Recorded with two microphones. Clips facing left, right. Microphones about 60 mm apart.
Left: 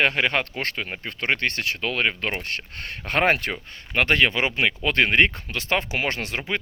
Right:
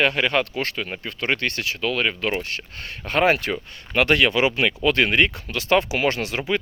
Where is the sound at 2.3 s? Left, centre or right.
Left.